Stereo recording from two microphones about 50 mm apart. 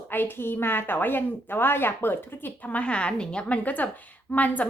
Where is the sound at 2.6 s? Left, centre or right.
Left.